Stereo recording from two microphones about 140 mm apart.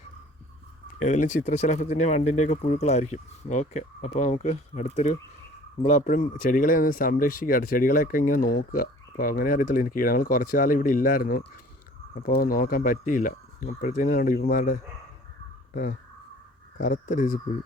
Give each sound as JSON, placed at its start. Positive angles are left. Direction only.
{"t": 0.9, "sound": "speech", "side_deg": 60}
{"t": 6.1, "sound": "speech", "side_deg": 75}